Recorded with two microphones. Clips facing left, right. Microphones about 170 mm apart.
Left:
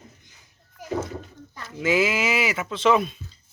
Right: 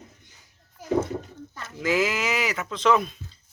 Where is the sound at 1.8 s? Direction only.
5° left (ahead or behind).